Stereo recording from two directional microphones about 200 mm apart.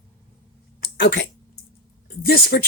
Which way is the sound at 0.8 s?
55° left (ahead or behind).